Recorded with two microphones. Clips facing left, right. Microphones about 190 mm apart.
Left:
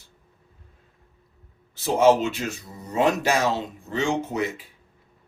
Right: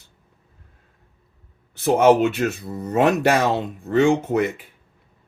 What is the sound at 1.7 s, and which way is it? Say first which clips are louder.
Speech: right 3 dB; 60° right (ahead or behind).